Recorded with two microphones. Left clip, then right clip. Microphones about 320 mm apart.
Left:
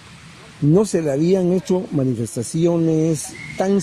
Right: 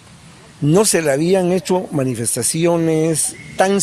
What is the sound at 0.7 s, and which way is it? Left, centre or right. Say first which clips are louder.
Speech: right 4 dB; right.